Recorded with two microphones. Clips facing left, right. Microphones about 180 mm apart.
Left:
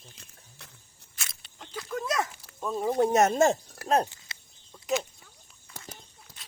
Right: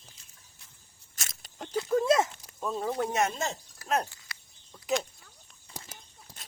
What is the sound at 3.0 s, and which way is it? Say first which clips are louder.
Speech: left 8 dB; 40° left (ahead or behind).